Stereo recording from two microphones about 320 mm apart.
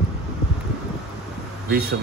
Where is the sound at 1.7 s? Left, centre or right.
Right.